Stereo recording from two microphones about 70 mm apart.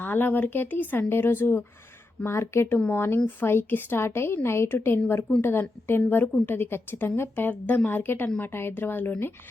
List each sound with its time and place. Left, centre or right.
0.0 s a woman's voice: left